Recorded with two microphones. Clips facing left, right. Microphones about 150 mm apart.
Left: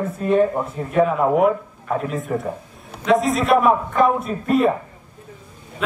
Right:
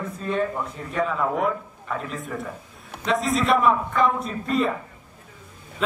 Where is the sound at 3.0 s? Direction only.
Centre (ahead or behind).